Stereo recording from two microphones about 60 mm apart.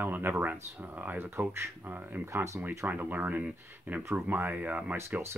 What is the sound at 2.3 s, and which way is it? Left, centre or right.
Speech, right.